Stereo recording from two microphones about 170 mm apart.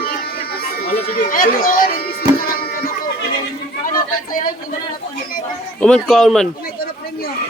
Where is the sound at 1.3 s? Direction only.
55° left (ahead or behind).